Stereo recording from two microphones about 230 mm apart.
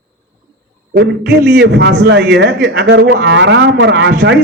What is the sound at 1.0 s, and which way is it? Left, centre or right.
A man's voice, right.